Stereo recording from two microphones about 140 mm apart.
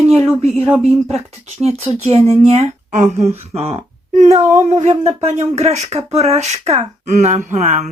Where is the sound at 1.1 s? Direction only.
50° right (ahead or behind).